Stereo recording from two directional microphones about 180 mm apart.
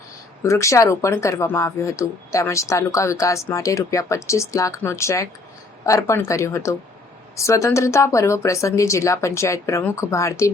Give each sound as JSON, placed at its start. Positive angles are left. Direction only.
{"t": 0.4, "sound": "speech", "side_deg": 15}